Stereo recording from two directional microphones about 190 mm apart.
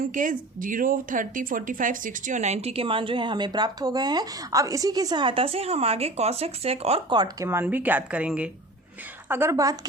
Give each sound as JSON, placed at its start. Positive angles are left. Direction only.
{"t": 0.0, "sound": "a woman's voice", "side_deg": -45}